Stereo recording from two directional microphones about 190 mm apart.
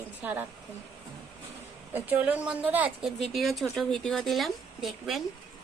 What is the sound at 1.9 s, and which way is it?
Speech, 10° right (ahead or behind).